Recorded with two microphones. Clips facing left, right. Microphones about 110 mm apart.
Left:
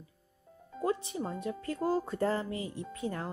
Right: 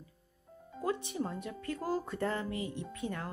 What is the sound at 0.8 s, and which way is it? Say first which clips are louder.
Speech: left 2 dB; 30° left (ahead or behind).